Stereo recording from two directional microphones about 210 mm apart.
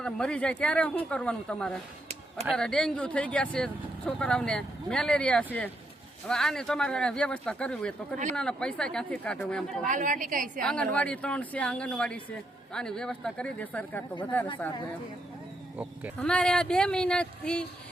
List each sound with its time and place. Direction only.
0.0 s speech: 5° left (ahead or behind)
9.8 s a woman's voice: 40° right (ahead or behind)
10.6 s speech: 5° left (ahead or behind)
16.2 s speech: 5° left (ahead or behind)